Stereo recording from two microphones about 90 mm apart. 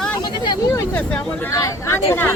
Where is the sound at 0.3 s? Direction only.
50° left (ahead or behind).